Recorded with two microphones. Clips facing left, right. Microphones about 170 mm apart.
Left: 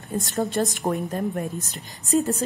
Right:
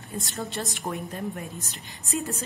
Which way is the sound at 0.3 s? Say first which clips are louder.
Left 10 dB; 45° left (ahead or behind).